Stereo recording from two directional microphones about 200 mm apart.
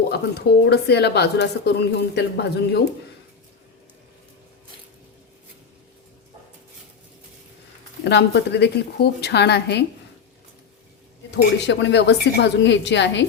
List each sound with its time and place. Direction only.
0.1 s a woman's voice: 55° left (ahead or behind)
8.0 s a woman's voice: 60° left (ahead or behind)
11.3 s a woman's voice: 60° left (ahead or behind)